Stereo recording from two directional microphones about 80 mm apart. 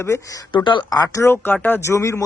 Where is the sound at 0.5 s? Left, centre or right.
Left.